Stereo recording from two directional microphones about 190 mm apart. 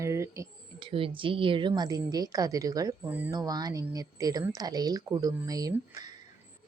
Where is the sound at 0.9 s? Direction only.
25° right (ahead or behind).